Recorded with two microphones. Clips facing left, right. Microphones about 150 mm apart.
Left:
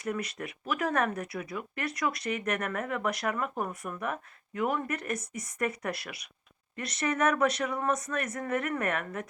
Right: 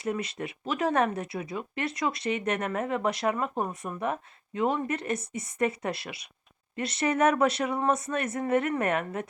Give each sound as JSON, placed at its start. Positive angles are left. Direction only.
{"t": 0.0, "sound": "speech", "side_deg": -25}